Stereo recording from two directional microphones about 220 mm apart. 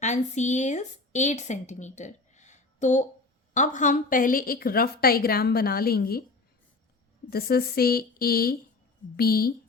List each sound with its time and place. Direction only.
0.0 s a woman's voice: 30° left (ahead or behind)
7.3 s a woman's voice: 45° left (ahead or behind)